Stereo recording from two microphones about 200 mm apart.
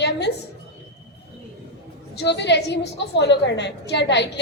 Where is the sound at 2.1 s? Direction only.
60° left (ahead or behind).